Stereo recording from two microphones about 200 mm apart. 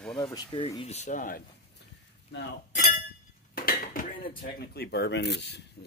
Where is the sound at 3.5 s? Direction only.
45° left (ahead or behind).